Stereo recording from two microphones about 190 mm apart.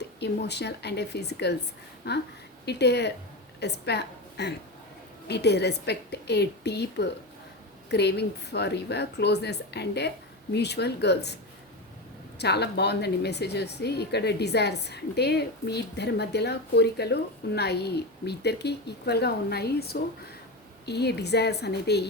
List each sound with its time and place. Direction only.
0.2 s a woman's voice: 60° left (ahead or behind)
12.4 s a woman's voice: 60° left (ahead or behind)